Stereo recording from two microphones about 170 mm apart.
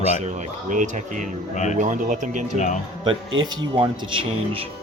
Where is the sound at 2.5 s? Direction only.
45° left (ahead or behind).